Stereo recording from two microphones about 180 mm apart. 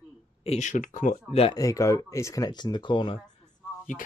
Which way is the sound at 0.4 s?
40° left (ahead or behind).